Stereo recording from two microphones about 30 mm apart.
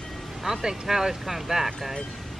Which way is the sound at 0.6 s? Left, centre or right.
Centre.